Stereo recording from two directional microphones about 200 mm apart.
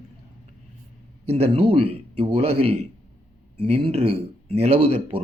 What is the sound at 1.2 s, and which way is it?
Speech, 30° right (ahead or behind).